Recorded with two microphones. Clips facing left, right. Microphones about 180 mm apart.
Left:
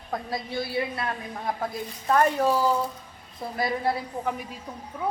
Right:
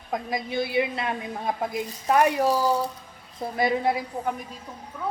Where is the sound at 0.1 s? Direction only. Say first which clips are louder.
Right 2 dB; 15° right (ahead or behind).